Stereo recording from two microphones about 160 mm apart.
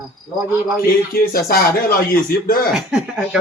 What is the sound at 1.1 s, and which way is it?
Speech, 70° left (ahead or behind).